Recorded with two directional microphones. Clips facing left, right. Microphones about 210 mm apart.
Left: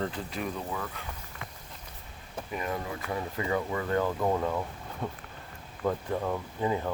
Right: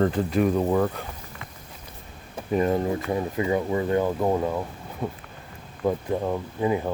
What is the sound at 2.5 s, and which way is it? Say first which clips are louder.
Speech: right 12 dB; 35° right (ahead or behind).